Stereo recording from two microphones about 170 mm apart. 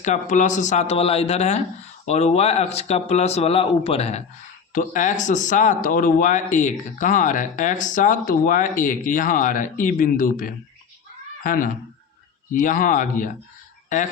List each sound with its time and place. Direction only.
0.0 s speech: 50° left (ahead or behind)
4.7 s speech: 50° left (ahead or behind)